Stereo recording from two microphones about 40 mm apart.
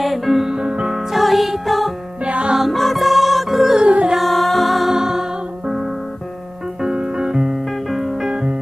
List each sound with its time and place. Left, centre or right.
0.0 s music: centre
0.5 s music: right
1.1 s music: centre
2.2 s music: right
2.7 s music: centre
3.8 s music: right
4.2 s music: centre
4.9 s music: centre
6.8 s music: centre
8.3 s music: right